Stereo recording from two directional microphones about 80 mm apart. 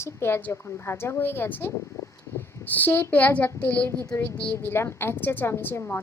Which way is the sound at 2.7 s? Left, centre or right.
Left.